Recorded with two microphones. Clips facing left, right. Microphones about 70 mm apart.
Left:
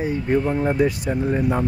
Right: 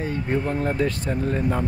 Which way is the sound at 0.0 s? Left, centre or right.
Centre.